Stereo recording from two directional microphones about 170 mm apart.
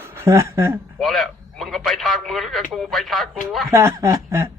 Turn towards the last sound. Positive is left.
turn(degrees=-15)  # may be behind; listen again after turning